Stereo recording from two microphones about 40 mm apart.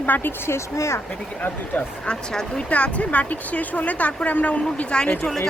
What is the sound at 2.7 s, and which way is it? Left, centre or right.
Speech, left.